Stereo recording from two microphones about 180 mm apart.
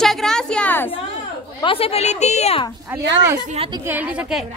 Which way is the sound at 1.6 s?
30° left (ahead or behind).